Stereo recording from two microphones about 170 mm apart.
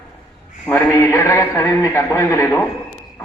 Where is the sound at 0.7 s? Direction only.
20° left (ahead or behind).